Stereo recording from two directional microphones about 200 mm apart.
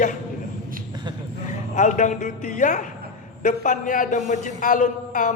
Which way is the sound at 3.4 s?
40° left (ahead or behind).